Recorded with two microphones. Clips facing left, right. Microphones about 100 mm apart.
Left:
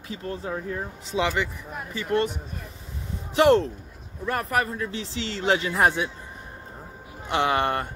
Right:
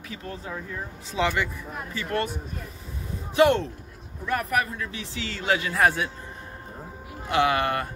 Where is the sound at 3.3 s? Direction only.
35° left (ahead or behind).